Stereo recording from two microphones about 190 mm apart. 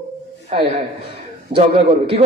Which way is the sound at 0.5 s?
35° right (ahead or behind).